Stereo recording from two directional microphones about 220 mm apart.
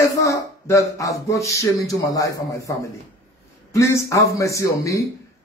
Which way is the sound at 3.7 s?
15° left (ahead or behind).